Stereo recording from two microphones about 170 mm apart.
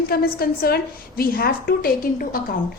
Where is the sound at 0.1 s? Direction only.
65° left (ahead or behind).